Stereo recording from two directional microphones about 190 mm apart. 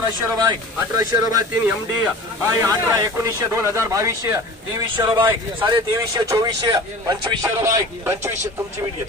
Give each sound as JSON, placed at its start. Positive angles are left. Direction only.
{"t": 0.2, "sound": "speech", "side_deg": -15}